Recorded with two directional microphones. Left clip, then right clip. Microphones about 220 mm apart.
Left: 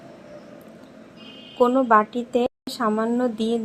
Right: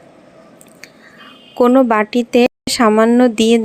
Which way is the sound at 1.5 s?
30° right (ahead or behind).